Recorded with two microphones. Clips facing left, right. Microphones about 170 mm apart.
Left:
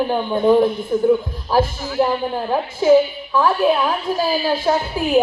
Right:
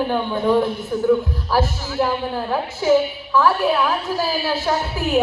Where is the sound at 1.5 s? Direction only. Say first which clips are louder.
Left 4 dB; 15° left (ahead or behind).